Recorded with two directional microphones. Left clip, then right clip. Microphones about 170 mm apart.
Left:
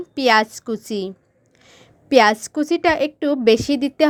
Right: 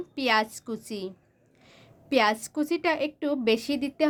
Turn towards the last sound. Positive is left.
turn(degrees=40)  # may be behind; listen again after turning